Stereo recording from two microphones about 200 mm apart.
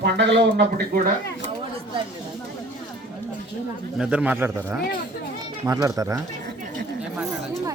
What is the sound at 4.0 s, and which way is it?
A man's voice, 5° right (ahead or behind).